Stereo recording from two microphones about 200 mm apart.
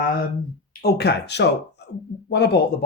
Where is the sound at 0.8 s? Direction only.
55° left (ahead or behind).